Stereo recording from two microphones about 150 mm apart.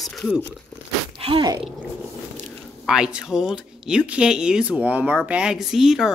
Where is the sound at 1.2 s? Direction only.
40° right (ahead or behind).